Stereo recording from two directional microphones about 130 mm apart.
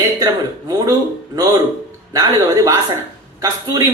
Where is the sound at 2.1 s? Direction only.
30° right (ahead or behind).